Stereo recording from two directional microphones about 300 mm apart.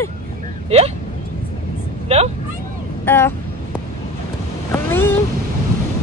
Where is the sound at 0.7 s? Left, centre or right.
Centre.